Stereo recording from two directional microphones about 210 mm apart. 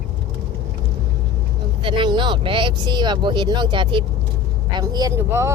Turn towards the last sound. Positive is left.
turn(degrees=-15)  # may be behind; listen again after turning